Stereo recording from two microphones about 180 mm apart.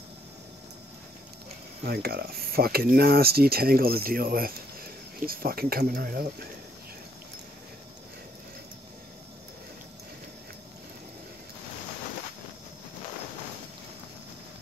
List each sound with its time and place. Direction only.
1.9 s speech: 60° right (ahead or behind)